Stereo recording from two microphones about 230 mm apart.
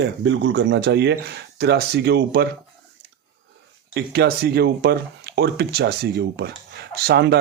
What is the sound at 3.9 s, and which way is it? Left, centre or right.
Speech, right.